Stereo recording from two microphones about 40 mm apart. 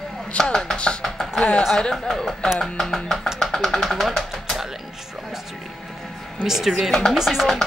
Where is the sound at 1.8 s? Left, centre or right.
Centre.